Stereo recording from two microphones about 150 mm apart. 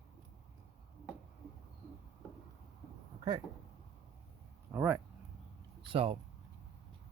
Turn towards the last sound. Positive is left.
turn(degrees=-40)  # may be behind; listen again after turning